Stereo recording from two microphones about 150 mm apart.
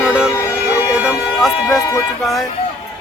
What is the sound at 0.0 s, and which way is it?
Music, 5° right (ahead or behind).